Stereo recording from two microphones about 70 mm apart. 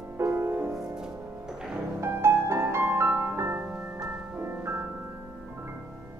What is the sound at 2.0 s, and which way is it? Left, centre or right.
Music, right.